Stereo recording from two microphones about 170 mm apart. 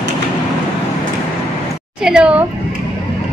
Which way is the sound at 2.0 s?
5° right (ahead or behind).